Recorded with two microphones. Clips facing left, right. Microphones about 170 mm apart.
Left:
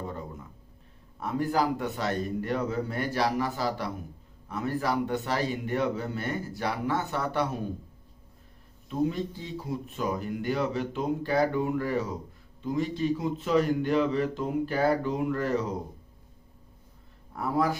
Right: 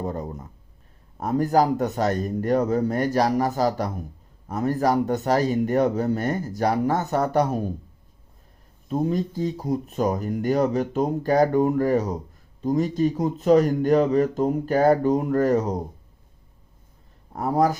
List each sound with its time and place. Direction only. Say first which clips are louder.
0.0 s a sound: right 7 dB; 40° right (ahead or behind)
1.2 s speech: right 7 dB; 40° right (ahead or behind)
8.9 s speech: right 4 dB; 40° right (ahead or behind)
17.3 s speech: right 6 dB; 40° right (ahead or behind)